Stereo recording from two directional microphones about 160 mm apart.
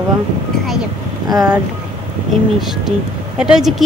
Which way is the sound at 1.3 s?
25° right (ahead or behind).